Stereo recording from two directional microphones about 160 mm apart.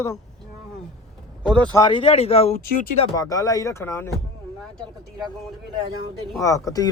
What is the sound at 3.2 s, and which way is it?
Speech, 20° left (ahead or behind).